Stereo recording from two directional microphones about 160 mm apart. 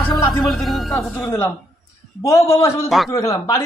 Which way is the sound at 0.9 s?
15° left (ahead or behind).